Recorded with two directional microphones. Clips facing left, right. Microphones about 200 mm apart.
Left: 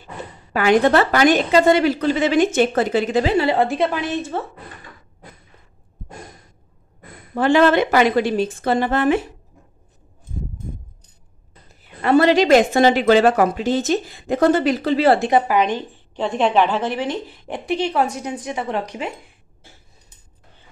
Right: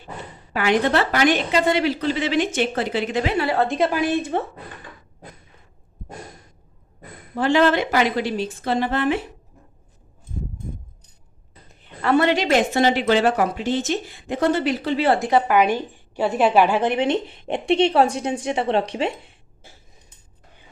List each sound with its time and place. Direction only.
0.5 s a woman's voice: 45° left (ahead or behind)
3.5 s a woman's voice: 5° left (ahead or behind)
3.9 s a woman's voice: 10° right (ahead or behind)
7.3 s a woman's voice: 55° left (ahead or behind)
12.4 s speech: 45° left (ahead or behind)
15.4 s a woman's voice: 5° right (ahead or behind); by 19.1 s 30° right (ahead or behind)